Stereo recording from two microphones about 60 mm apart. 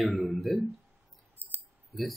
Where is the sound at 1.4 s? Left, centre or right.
Right.